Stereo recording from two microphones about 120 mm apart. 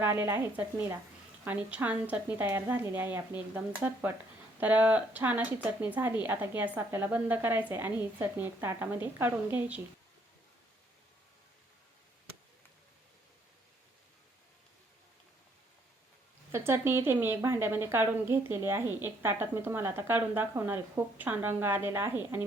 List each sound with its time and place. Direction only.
0.0 s a woman's voice: 15° right (ahead or behind)
16.5 s a woman's voice: 20° right (ahead or behind)